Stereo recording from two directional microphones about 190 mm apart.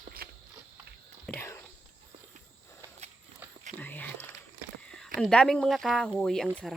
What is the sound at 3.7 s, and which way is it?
Whispering, 10° left (ahead or behind).